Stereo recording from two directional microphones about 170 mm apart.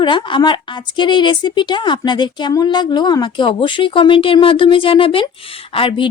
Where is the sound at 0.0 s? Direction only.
25° left (ahead or behind).